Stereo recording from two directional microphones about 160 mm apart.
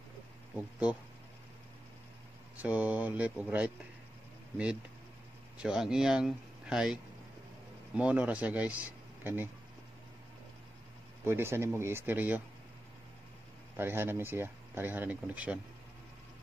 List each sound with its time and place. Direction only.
0.6 s speech: 10° right (ahead or behind)
2.5 s speech: 10° right (ahead or behind)
5.6 s speech: 5° right (ahead or behind)
11.2 s speech: 15° right (ahead or behind)
13.7 s speech: 15° right (ahead or behind)